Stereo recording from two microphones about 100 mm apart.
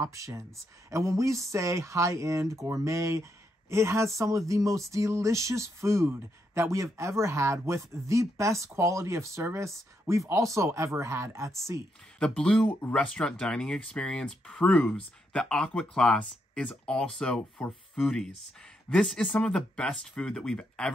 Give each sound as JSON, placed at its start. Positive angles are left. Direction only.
{"t": 0.0, "sound": "speech", "side_deg": -30}
{"t": 12.2, "sound": "speech", "side_deg": 10}